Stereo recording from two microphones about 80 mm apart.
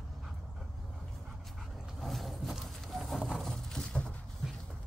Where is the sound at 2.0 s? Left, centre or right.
Centre.